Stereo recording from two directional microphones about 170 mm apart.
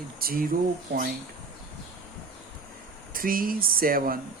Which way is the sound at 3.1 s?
55° right (ahead or behind).